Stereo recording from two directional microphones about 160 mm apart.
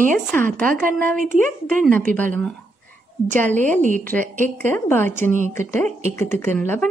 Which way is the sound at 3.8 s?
55° right (ahead or behind).